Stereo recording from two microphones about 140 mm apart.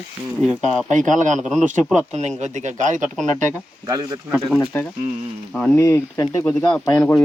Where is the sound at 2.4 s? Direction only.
60° right (ahead or behind).